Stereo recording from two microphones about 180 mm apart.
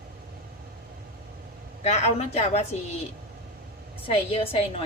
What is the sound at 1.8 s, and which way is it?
Speech, 40° left (ahead or behind).